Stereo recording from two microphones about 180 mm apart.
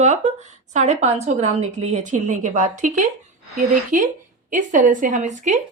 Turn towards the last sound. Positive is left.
turn(degrees=-45)  # may be behind; listen again after turning